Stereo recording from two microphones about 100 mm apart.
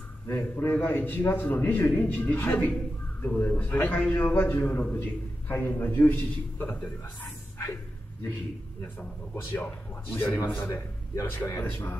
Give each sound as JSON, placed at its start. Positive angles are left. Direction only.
{"t": 0.3, "sound": "a man's voice", "side_deg": 25}
{"t": 8.8, "sound": "a man's voice", "side_deg": 20}